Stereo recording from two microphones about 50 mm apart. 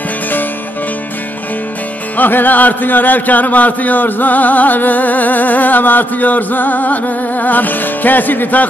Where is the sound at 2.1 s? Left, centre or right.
Left.